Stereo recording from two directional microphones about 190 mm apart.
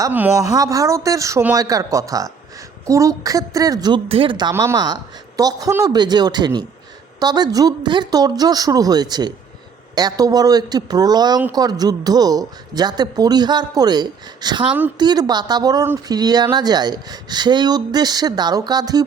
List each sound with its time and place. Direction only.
0.0 s speech: 15° right (ahead or behind)